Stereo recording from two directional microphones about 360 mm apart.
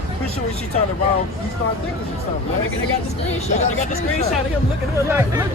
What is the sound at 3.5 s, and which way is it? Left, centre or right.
Speech, centre.